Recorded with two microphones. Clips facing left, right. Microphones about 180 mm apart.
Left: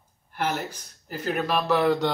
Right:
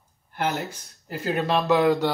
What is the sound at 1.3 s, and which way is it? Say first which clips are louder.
Speech: right 3 dB; 25° right (ahead or behind).